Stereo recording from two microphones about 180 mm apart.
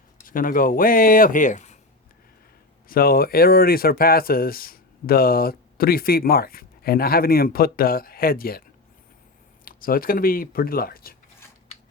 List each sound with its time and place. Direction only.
0.3 s speech: 50° left (ahead or behind)
2.9 s speech: 55° left (ahead or behind)
9.6 s speech: 55° left (ahead or behind)